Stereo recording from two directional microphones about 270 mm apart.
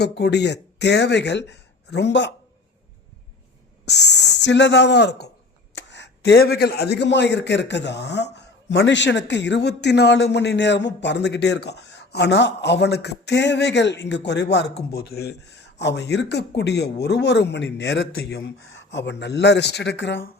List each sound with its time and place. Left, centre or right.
0.0 s a man's voice: left
4.1 s a man's voice: left